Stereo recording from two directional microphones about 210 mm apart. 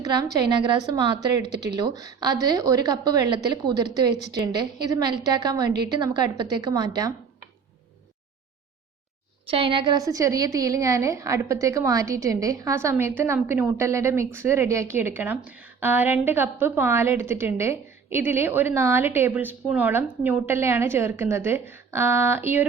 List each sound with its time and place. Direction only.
0.0 s a woman's voice: 20° right (ahead or behind)
9.5 s a woman's voice: 25° right (ahead or behind)